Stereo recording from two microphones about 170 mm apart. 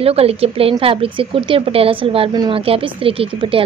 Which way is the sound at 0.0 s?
35° right (ahead or behind).